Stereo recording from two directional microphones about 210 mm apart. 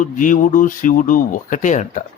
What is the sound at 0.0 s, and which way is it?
A man's voice, 35° left (ahead or behind).